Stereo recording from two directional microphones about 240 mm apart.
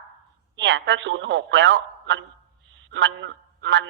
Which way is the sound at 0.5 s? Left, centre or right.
Right.